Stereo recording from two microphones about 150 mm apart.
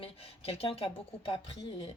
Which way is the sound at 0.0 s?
40° left (ahead or behind).